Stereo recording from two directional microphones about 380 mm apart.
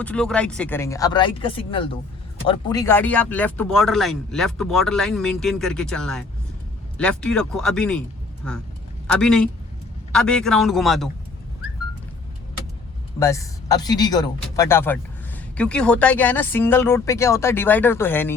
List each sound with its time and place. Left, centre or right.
0.0 s speech: centre
13.1 s speech: centre